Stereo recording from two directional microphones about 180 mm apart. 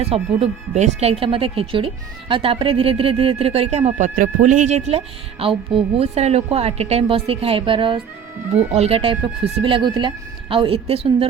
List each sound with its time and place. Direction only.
0.0 s speech: 35° right (ahead or behind)